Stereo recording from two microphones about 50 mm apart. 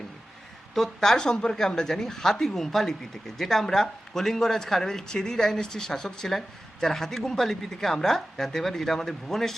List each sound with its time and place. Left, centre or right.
0.7 s a woman's voice: centre